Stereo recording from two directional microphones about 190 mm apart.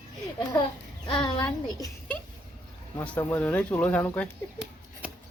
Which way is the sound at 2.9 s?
10° left (ahead or behind).